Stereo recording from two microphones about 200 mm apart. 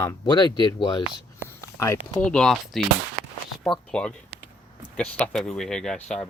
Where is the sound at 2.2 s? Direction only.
5° left (ahead or behind).